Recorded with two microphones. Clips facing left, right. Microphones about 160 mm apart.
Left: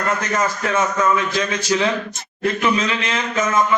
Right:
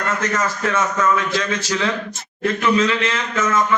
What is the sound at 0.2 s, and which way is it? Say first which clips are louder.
A man's voice: even; 15° left (ahead or behind).